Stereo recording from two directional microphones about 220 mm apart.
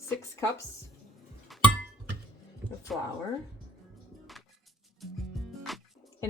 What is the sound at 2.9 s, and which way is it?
Speech, centre (ahead or behind).